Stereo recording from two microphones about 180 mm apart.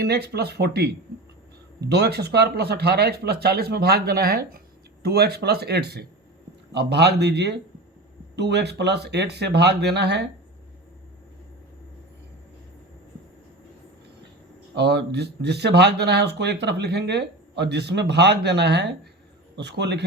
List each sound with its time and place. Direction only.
0.0 s speech: 60° right (ahead or behind)
14.8 s speech: 65° right (ahead or behind)